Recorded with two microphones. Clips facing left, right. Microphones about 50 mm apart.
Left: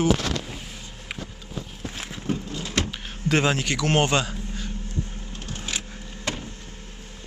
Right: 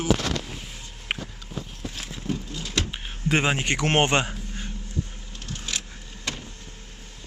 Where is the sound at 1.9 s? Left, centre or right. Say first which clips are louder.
Left 2 dB; left.